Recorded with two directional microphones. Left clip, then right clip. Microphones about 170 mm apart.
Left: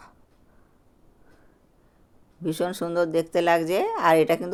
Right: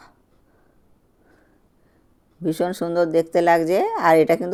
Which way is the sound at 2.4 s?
30° right (ahead or behind).